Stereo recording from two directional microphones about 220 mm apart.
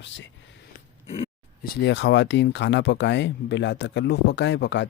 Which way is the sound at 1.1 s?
25° left (ahead or behind).